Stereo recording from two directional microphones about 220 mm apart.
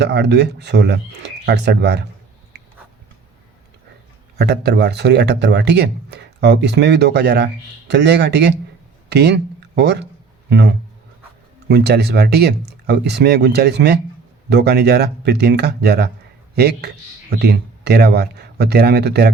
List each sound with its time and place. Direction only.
0.0 s speech: 50° right (ahead or behind)
4.4 s speech: 50° right (ahead or behind)
11.7 s speech: 50° right (ahead or behind)